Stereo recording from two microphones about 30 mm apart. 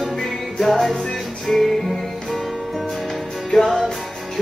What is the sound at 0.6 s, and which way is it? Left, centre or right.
Music, centre.